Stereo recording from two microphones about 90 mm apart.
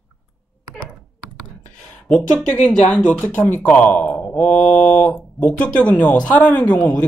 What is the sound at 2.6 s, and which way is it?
Speech, 15° left (ahead or behind).